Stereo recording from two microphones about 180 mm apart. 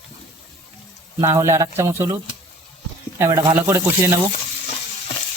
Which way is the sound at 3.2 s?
15° right (ahead or behind).